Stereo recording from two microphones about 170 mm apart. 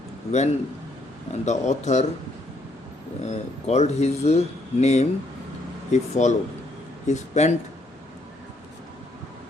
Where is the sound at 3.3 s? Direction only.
40° left (ahead or behind).